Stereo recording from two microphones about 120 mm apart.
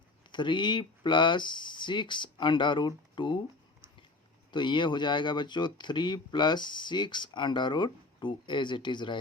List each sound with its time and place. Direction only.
0.3 s speech: 40° left (ahead or behind)